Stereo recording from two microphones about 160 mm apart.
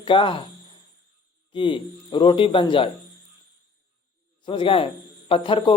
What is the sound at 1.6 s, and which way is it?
A man's voice, 30° left (ahead or behind).